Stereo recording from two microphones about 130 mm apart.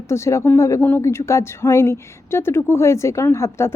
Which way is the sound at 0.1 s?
20° left (ahead or behind).